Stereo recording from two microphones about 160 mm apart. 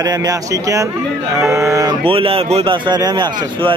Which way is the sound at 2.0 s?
35° right (ahead or behind).